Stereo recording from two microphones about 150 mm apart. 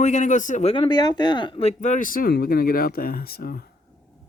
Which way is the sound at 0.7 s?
35° left (ahead or behind).